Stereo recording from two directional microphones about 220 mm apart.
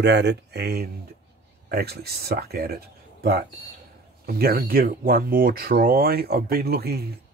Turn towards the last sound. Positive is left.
turn(degrees=-45)  # may be behind; listen again after turning